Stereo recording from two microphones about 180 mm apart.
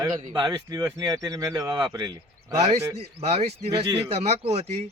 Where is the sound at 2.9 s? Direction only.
35° right (ahead or behind).